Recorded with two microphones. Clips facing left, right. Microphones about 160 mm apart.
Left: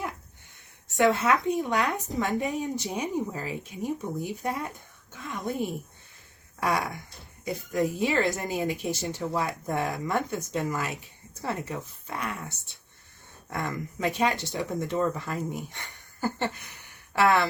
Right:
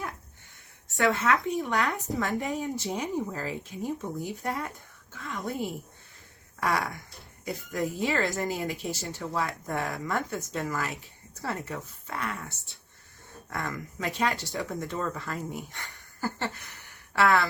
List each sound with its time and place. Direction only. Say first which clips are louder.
0.9 s a woman's voice: left 3 dB; 20° left (ahead or behind)